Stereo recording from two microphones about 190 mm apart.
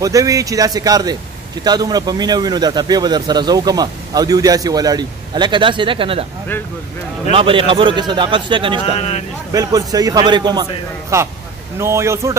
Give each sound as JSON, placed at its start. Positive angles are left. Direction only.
{"t": 0.0, "sound": "a man's voice", "side_deg": -15}
{"t": 7.2, "sound": "speech", "side_deg": -30}
{"t": 8.8, "sound": "speech", "side_deg": 35}
{"t": 9.5, "sound": "a man's voice", "side_deg": -20}